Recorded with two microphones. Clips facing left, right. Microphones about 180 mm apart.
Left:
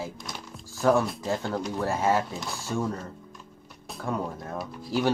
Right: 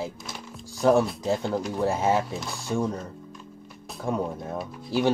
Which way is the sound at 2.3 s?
Centre (ahead or behind).